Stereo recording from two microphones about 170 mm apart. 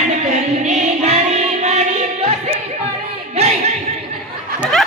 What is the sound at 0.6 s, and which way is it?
Music, 40° right (ahead or behind).